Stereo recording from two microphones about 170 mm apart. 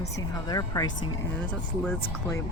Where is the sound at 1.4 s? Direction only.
10° left (ahead or behind).